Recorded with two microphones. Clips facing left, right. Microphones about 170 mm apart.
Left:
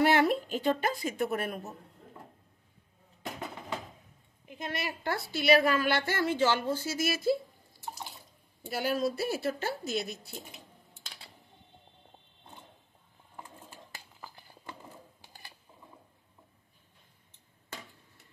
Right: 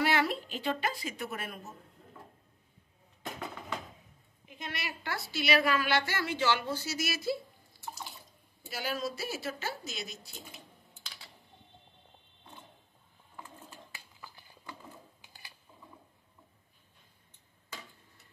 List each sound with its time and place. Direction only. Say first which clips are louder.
0.0 s a woman's voice: left 5 dB; 55° left (ahead or behind)
4.5 s a woman's voice: left 5 dB; 50° left (ahead or behind)
8.6 s a woman's voice: left 6 dB; 55° left (ahead or behind)
13.9 s a sound: left 3 dB; 45° left (ahead or behind)